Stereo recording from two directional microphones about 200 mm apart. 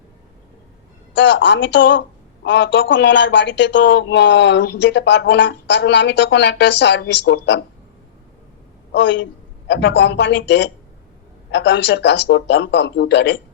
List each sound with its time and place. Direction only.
1.1 s a woman's voice: 65° left (ahead or behind)
8.9 s a woman's voice: 65° left (ahead or behind)